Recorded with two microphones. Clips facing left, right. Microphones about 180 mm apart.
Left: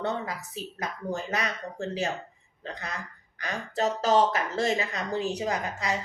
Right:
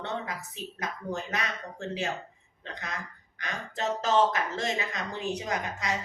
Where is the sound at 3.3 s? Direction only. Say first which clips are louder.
Left 5 dB; 35° left (ahead or behind).